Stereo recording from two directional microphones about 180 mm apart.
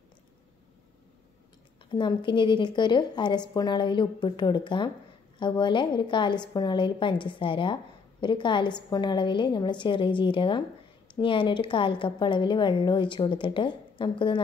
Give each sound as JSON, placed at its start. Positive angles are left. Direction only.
{"t": 1.9, "sound": "a woman's voice", "side_deg": 25}